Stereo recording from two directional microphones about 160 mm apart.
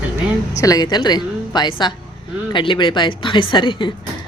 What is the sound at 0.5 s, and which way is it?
Speech, 20° left (ahead or behind).